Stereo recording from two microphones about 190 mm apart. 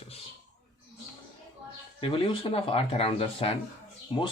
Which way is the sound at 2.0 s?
30° left (ahead or behind).